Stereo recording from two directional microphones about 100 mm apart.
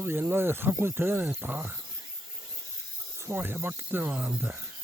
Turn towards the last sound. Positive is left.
turn(degrees=-15)  # may be behind; listen again after turning